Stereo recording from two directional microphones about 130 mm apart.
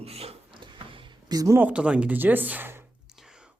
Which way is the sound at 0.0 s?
50° right (ahead or behind).